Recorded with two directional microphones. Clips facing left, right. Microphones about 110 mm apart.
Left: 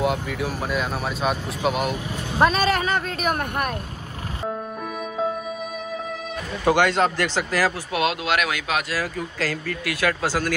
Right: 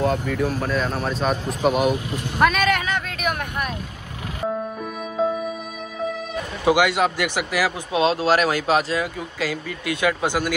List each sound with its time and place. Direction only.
0.0 s speech: 10° left (ahead or behind)
2.4 s speech: 35° left (ahead or behind)
6.6 s speech: 10° right (ahead or behind)
7.9 s speech: 30° right (ahead or behind)
9.0 s speech: 15° right (ahead or behind)